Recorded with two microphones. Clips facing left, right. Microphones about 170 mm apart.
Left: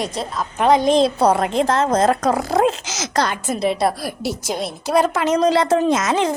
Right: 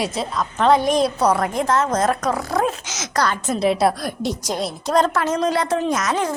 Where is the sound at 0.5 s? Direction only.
15° left (ahead or behind).